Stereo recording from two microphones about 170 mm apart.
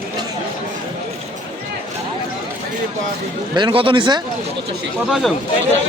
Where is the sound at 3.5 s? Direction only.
30° right (ahead or behind).